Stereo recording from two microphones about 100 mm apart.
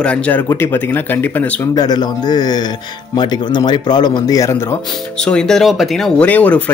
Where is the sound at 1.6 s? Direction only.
40° left (ahead or behind).